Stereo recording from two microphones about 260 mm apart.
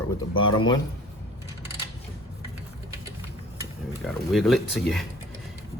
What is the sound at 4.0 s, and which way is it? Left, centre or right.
Speech, centre.